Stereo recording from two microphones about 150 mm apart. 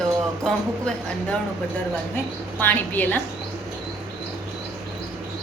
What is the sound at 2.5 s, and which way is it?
Speech, 10° left (ahead or behind).